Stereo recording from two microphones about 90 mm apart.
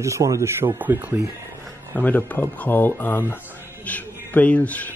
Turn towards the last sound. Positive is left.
turn(degrees=15)  # may be behind; listen again after turning